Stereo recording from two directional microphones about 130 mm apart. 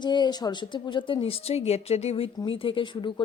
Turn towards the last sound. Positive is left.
turn(degrees=40)  # may be behind; listen again after turning